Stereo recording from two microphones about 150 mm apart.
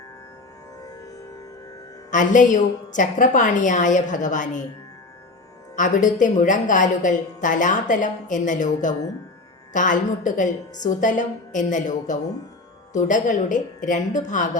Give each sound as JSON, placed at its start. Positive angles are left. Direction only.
{"t": 2.0, "sound": "a woman's voice", "side_deg": 55}
{"t": 5.7, "sound": "a woman's voice", "side_deg": 60}